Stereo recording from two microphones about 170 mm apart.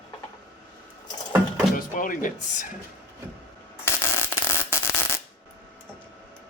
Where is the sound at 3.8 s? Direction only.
15° left (ahead or behind).